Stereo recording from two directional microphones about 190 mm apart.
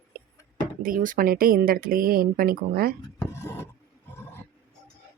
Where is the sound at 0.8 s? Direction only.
45° right (ahead or behind).